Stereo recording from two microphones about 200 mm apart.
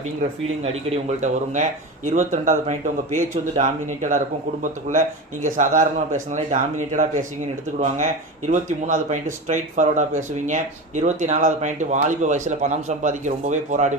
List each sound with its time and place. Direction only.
2.0 s speech: 35° right (ahead or behind)